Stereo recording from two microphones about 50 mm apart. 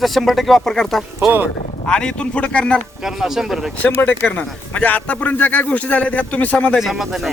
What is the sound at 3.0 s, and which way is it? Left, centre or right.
Speech, centre.